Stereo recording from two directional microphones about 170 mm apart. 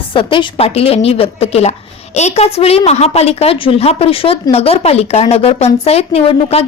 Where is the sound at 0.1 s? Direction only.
30° left (ahead or behind).